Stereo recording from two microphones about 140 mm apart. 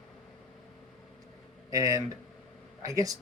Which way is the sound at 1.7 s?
25° right (ahead or behind).